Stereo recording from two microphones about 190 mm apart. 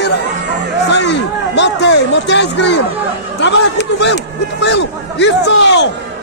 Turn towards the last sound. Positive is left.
turn(degrees=70)  # may be behind; listen again after turning